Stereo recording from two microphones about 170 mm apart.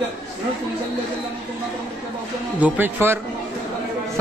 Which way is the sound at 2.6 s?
10° right (ahead or behind).